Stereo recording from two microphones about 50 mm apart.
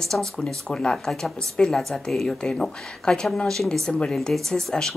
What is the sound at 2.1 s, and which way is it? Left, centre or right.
Speech, centre.